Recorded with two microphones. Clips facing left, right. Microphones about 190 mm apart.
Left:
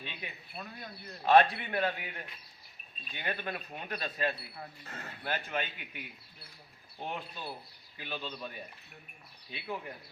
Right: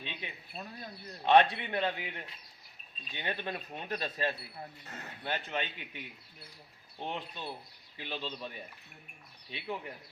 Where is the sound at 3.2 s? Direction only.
25° right (ahead or behind).